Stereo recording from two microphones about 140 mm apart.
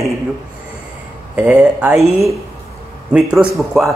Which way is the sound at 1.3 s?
10° right (ahead or behind).